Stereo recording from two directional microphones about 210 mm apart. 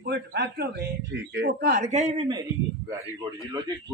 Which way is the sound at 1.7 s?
35° right (ahead or behind).